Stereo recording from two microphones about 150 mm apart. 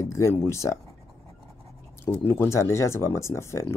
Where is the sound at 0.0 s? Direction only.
20° left (ahead or behind).